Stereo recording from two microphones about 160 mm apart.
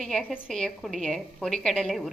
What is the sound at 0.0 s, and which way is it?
A woman's voice, centre (ahead or behind).